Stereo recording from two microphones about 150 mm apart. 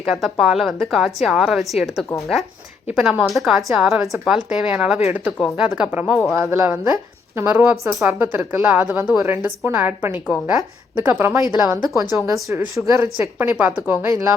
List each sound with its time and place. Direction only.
0.1 s a woman's voice: centre (ahead or behind); by 13.1 s 20° right (ahead or behind)
13.4 s a woman's voice: 5° right (ahead or behind)